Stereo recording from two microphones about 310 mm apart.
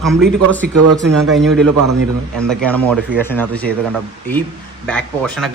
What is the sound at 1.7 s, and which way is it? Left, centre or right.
Speech, right.